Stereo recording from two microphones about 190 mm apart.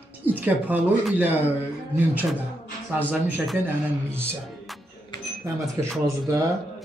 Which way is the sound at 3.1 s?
10° right (ahead or behind).